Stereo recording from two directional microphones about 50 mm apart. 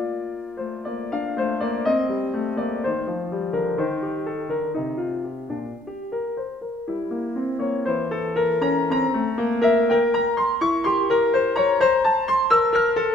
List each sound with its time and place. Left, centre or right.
1.1 s music: centre
2.3 s music: centre
4.5 s music: centre
7.6 s music: centre
9.2 s music: centre
9.6 s music: centre